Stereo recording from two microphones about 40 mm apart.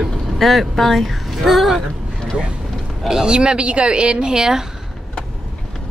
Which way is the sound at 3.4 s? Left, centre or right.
Right.